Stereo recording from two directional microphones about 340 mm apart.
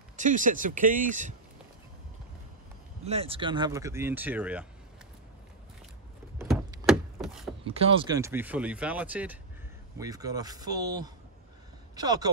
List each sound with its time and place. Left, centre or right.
0.1 s speech: right
3.1 s speech: centre
6.3 s a sound: centre
7.6 s speech: centre